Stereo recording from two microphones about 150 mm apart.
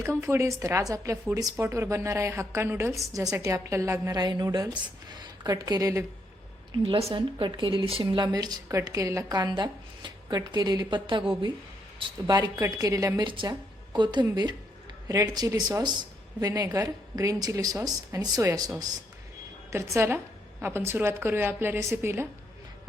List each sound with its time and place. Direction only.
0.2 s a woman's voice: 20° right (ahead or behind)
6.8 s a woman's voice: 35° right (ahead or behind)
13.2 s a woman's voice: 35° right (ahead or behind)
19.7 s a woman's voice: 15° right (ahead or behind)